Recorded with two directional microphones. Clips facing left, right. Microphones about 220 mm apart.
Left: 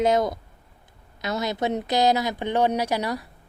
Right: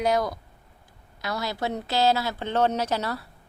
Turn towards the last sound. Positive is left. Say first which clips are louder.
# left 2 dB
turn(degrees=15)  # may be behind; listen again after turning